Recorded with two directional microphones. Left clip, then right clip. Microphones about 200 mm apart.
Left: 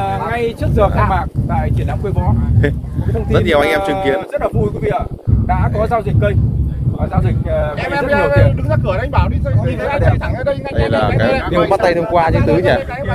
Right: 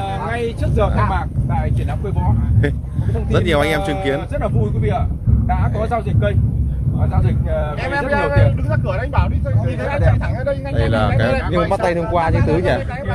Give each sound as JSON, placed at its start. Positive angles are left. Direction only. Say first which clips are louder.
{"t": 0.0, "sound": "a sound", "louder": "left 5 dB", "side_deg": 45}
{"t": 3.3, "sound": "speech", "louder": "left 4 dB", "side_deg": -15}
{"t": 4.4, "sound": "speech", "louder": "left 5 dB", "side_deg": 45}
{"t": 8.0, "sound": "speech", "louder": "left 5 dB", "side_deg": -5}
{"t": 10.9, "sound": "speech", "louder": "left 4 dB", "side_deg": -15}
{"t": 11.5, "sound": "speech", "louder": "left 6 dB", "side_deg": 0}